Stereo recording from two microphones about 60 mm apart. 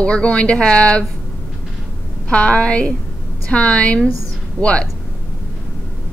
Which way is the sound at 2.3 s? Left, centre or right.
Centre.